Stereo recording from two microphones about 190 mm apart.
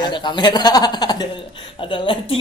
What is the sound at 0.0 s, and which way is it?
A woman's voice, 25° left (ahead or behind).